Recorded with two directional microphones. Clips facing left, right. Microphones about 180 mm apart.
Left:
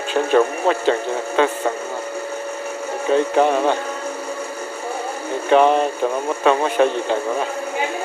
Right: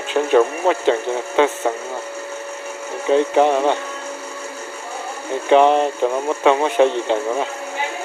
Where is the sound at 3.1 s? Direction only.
20° right (ahead or behind).